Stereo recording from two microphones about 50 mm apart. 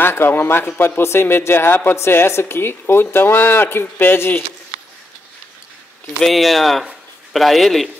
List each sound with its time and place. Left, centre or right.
0.0 s a man's voice: left
6.2 s speech: centre